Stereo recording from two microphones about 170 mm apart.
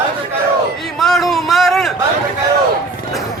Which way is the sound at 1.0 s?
Centre (ahead or behind).